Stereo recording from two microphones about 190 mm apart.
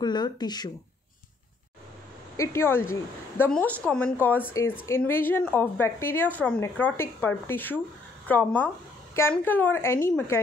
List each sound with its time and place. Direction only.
0.0 s speech: 20° left (ahead or behind)
2.3 s a woman's voice: 15° left (ahead or behind)